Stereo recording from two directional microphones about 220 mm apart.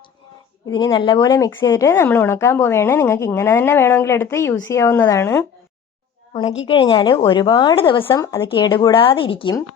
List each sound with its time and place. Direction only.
0.7 s speech: 20° left (ahead or behind)
6.3 s speech: 25° left (ahead or behind)